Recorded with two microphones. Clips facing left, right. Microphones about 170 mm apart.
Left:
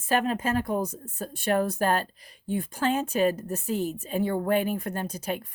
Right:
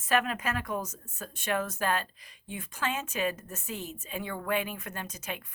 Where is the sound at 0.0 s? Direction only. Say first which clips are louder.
Left 3 dB; 30° left (ahead or behind).